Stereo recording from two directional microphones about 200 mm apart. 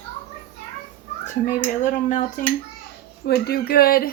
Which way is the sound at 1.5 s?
40° left (ahead or behind).